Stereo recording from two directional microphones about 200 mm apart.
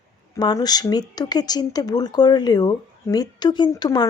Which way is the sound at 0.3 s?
20° left (ahead or behind).